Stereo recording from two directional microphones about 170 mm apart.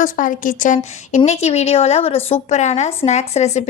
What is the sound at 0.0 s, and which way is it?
A woman's voice, 50° left (ahead or behind).